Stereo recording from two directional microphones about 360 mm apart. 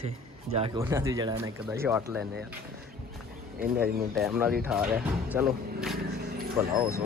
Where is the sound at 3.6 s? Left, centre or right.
Right.